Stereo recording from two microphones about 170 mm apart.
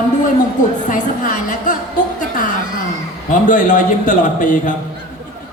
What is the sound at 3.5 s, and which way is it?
A man's voice, 50° left (ahead or behind).